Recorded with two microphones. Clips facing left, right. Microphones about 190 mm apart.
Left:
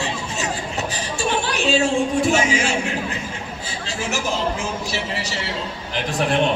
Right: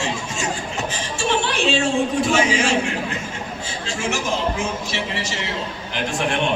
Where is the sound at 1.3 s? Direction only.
40° left (ahead or behind).